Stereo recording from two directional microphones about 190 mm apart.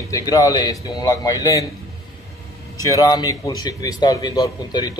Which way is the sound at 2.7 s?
20° left (ahead or behind).